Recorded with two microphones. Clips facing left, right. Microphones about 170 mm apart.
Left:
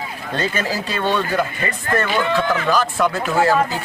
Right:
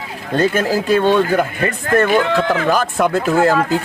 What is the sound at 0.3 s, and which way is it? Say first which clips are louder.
Speech: right 7 dB; 50° right (ahead or behind).